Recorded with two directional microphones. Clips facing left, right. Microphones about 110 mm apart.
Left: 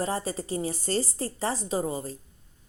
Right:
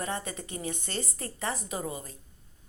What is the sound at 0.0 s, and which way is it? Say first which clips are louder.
A woman's voice: left 5 dB; 30° left (ahead or behind).